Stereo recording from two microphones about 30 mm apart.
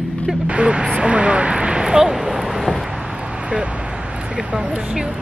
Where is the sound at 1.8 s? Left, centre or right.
Centre.